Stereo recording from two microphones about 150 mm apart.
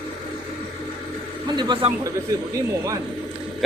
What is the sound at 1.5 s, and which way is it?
Speech, 30° right (ahead or behind).